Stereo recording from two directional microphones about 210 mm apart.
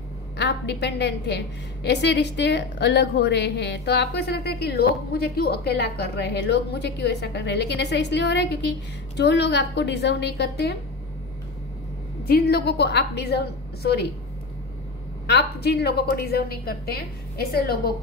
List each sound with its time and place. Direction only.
0.4 s a woman's voice: 55° left (ahead or behind)
12.3 s a woman's voice: 50° left (ahead or behind)
15.2 s a woman's voice: 55° left (ahead or behind)